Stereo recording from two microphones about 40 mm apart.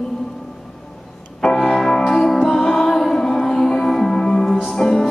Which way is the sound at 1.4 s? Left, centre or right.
Centre.